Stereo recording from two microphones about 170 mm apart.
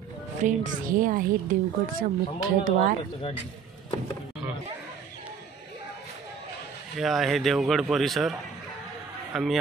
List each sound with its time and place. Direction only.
0.4 s a woman's voice: 50° right (ahead or behind)
7.0 s a man's voice: centre (ahead or behind)